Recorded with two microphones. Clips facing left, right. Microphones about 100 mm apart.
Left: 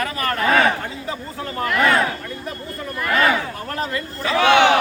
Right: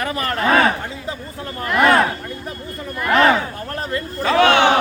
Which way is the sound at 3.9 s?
40° right (ahead or behind).